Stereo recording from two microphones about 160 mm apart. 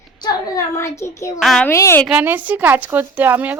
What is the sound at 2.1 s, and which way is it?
A woman's voice, 10° right (ahead or behind).